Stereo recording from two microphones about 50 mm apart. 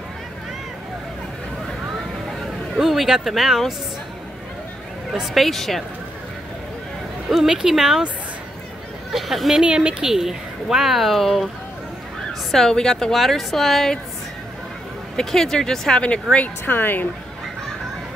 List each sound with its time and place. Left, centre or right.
2.4 s speech: centre
5.3 s speech: centre
7.2 s a woman's voice: centre
9.1 s speech: centre
9.6 s a woman's voice: centre
10.1 s speech: centre
12.4 s speech: centre
15.1 s speech: centre
16.0 s speech: left
16.6 s a woman's voice: left